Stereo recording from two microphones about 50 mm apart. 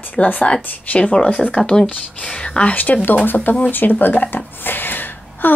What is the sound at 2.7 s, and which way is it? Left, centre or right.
A woman's voice, left.